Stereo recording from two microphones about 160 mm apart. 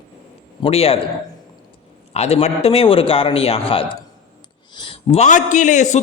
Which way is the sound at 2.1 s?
40° left (ahead or behind).